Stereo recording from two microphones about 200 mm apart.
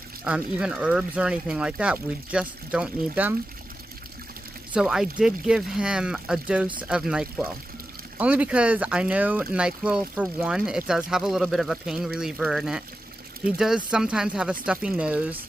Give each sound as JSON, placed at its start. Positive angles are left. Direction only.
{"t": 0.2, "sound": "speech", "side_deg": -5}
{"t": 4.7, "sound": "speech", "side_deg": 0}